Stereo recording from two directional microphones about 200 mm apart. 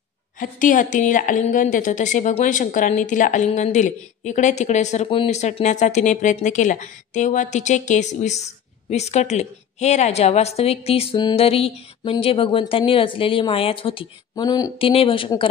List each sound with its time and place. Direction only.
0.4 s a woman's voice: 40° left (ahead or behind); by 15.4 s 25° left (ahead or behind)